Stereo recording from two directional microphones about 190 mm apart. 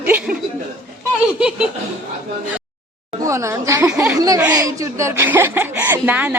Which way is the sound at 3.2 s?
15° right (ahead or behind).